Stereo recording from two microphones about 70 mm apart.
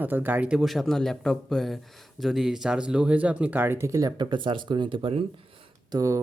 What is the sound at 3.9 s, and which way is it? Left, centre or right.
Speech, right.